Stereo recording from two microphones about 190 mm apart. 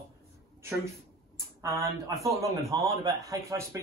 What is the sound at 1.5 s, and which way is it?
A man's voice, 15° right (ahead or behind).